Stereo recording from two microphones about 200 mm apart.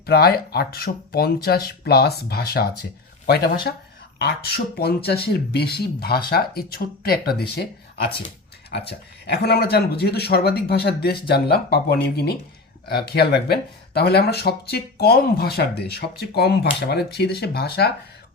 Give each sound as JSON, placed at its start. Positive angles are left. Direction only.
{"t": 0.0, "sound": "speech", "side_deg": 50}
{"t": 8.7, "sound": "speech", "side_deg": 55}